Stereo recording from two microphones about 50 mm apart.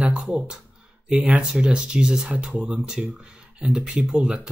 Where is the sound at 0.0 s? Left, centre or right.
Centre.